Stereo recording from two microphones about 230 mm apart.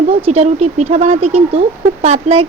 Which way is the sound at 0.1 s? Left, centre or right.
Right.